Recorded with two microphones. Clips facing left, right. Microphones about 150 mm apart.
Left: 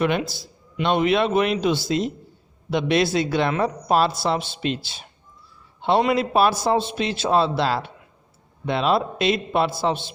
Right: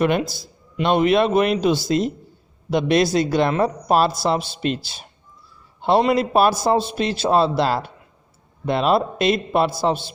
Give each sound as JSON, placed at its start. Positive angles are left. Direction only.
{"t": 0.0, "sound": "a man's voice", "side_deg": -45}